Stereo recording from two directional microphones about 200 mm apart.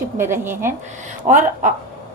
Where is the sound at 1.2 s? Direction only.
40° right (ahead or behind).